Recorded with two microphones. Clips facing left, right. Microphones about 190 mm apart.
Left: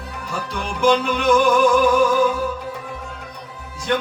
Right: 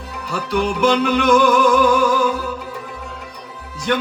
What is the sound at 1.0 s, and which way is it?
Music, 70° right (ahead or behind).